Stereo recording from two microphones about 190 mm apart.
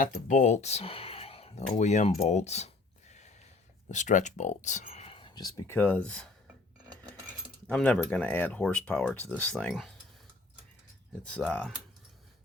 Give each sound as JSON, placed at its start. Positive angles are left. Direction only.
{"t": 0.0, "sound": "speech", "side_deg": 40}
{"t": 7.7, "sound": "speech", "side_deg": 5}
{"t": 11.3, "sound": "speech", "side_deg": 5}